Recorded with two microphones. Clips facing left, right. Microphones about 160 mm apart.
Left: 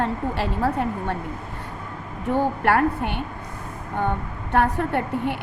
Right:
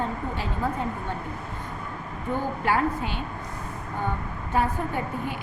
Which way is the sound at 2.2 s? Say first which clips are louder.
Left 6 dB; 70° left (ahead or behind).